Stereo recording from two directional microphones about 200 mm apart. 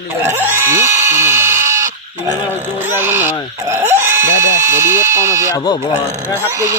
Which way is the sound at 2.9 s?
10° right (ahead or behind).